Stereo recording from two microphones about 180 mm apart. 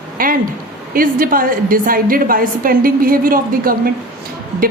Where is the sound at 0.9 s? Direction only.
50° right (ahead or behind).